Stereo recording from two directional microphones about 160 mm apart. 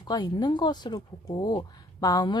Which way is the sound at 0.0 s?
25° left (ahead or behind).